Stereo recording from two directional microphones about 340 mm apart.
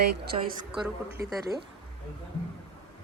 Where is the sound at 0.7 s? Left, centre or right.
Centre.